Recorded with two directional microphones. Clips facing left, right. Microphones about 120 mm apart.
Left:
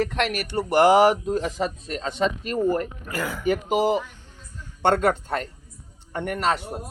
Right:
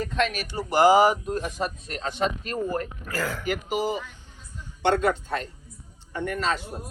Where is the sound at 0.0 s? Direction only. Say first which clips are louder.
Left 2 dB; 70° left (ahead or behind); by 1.6 s 90° left.